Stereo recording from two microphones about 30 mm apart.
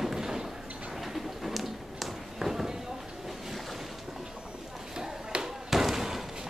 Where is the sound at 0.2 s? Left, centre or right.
Right.